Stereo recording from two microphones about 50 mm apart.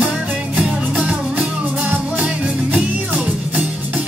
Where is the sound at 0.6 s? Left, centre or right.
Right.